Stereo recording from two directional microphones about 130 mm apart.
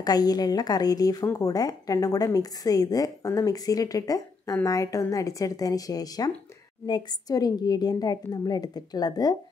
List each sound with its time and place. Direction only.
0.0 s a woman's voice: 30° left (ahead or behind)